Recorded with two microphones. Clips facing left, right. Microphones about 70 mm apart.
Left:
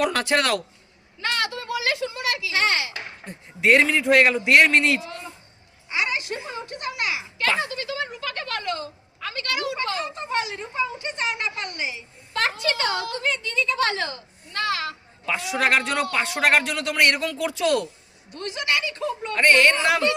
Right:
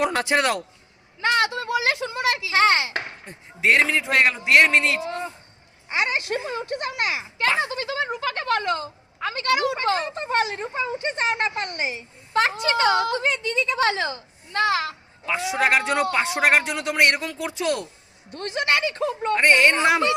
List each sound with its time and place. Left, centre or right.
0.0 s speech: centre; by 2.9 s right
3.6 s a man's voice: centre
5.9 s a child's voice: right
12.3 s a woman's voice: right
15.3 s speech: centre
18.3 s speech: right
19.3 s speech: centre